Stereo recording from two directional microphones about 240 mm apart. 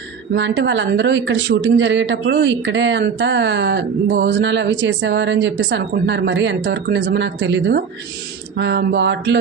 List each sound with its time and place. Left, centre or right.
0.3 s a woman's voice: right